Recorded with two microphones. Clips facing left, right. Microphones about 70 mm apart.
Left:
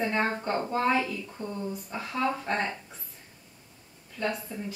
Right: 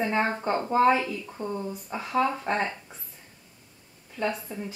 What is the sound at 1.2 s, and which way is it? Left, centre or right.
Speech, centre.